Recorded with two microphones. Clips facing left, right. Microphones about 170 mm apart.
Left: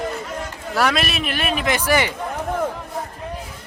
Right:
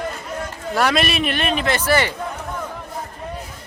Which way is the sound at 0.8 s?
Centre (ahead or behind).